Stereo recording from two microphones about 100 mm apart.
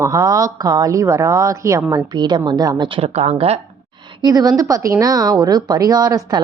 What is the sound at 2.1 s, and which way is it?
Speech, 45° right (ahead or behind).